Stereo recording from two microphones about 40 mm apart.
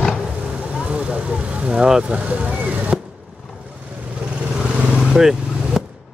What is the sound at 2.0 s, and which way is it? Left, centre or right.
Speech, right.